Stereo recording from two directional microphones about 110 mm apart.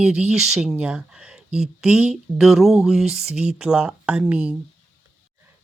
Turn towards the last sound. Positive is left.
turn(degrees=-10)  # may be behind; listen again after turning